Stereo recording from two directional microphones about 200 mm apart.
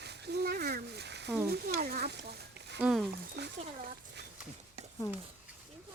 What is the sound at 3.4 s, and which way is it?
Speech, 55° right (ahead or behind).